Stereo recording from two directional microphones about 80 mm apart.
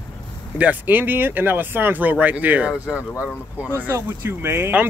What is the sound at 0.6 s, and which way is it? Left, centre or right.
Speech, right.